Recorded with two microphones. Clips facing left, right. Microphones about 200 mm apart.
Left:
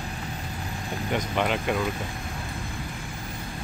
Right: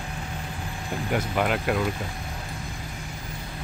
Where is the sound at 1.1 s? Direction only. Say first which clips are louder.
Right 1 dB; 5° right (ahead or behind).